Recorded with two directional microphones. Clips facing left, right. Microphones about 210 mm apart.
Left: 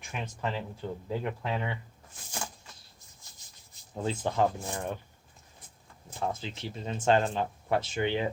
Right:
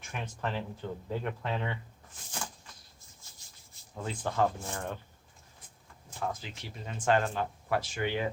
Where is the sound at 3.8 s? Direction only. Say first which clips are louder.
Even; 20° left (ahead or behind).